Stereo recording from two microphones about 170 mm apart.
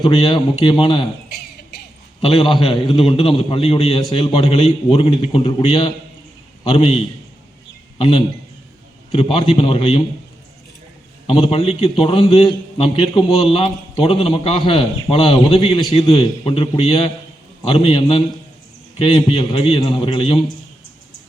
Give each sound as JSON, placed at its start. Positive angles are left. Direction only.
{"t": 0.0, "sound": "a man's voice", "side_deg": 30}
{"t": 2.2, "sound": "a man's voice", "side_deg": 30}
{"t": 11.3, "sound": "a man's voice", "side_deg": 30}